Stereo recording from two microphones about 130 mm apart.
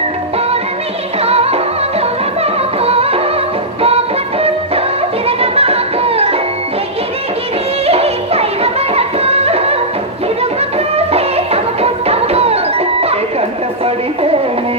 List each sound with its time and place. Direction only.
1.2 s music: 50° right (ahead or behind)
5.4 s music: 50° right (ahead or behind)
7.9 s music: 50° right (ahead or behind)
10.9 s music: 50° right (ahead or behind)